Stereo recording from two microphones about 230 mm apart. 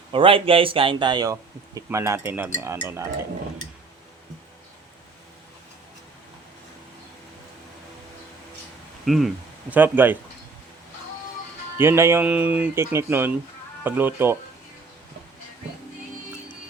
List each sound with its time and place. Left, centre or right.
0.1 s speech: right
9.0 s speech: centre
11.8 s speech: centre